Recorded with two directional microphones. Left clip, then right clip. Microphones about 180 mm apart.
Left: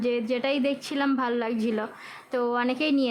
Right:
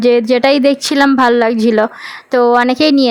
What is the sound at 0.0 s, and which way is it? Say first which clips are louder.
Speech: right 16 dB; 45° right (ahead or behind).